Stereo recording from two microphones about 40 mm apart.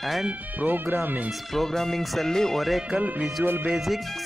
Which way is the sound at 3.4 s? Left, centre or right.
Right.